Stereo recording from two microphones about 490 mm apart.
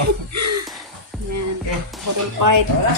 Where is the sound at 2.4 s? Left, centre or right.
Right.